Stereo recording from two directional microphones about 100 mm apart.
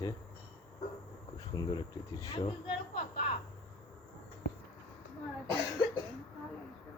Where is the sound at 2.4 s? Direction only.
80° left.